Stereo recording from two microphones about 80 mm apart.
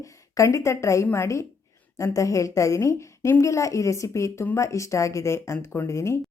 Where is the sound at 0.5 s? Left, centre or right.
Left.